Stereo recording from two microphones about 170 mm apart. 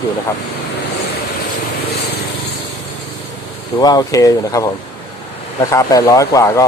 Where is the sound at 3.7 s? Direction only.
25° left (ahead or behind).